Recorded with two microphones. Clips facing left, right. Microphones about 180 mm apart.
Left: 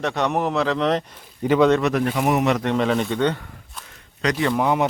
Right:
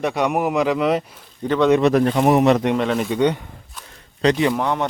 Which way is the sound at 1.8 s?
35° right (ahead or behind).